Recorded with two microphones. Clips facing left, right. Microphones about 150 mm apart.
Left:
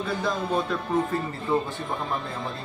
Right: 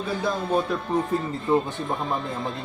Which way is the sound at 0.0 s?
10° right (ahead or behind).